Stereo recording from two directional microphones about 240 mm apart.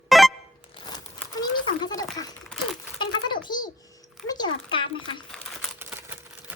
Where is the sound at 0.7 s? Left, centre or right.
Centre.